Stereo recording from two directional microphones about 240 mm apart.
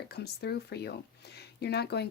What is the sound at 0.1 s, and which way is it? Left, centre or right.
Speech, left.